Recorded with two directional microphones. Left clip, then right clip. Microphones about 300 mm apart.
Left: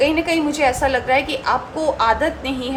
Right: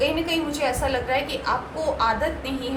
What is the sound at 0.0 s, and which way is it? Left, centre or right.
A woman's voice, left.